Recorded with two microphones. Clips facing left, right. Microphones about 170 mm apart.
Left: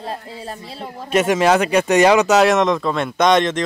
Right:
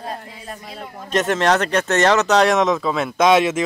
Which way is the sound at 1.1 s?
10° left (ahead or behind).